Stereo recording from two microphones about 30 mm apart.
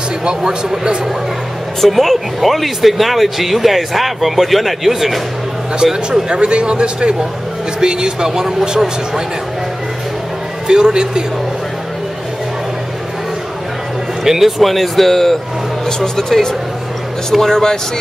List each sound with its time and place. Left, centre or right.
0.2 s a man's voice: right
1.9 s speech: centre
6.2 s speech: right
10.7 s speech: right
14.2 s a man's voice: centre
14.6 s speech: centre